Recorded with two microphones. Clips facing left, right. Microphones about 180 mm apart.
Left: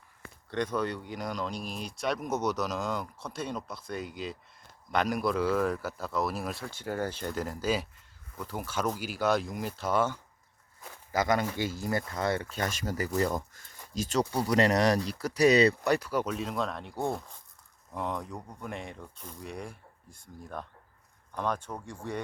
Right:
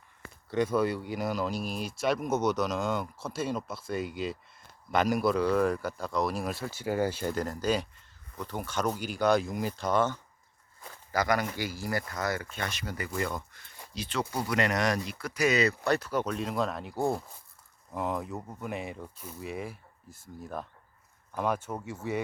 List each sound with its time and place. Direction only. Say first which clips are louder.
0.5 s speech: right 4 dB; 5° right (ahead or behind)
7.4 s speech: right 1 dB; 5° left (ahead or behind)
11.1 s speech: left 1 dB; 25° left (ahead or behind)
12.5 s speech: left 4 dB; 45° left (ahead or behind)
15.8 s speech: even; 10° left (ahead or behind); by 22.2 s 5° right (ahead or behind)